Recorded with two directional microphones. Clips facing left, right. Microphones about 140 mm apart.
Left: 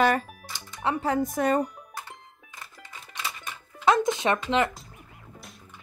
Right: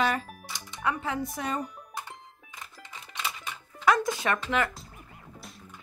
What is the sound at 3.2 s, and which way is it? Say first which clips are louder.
Music: even; 5° left (ahead or behind).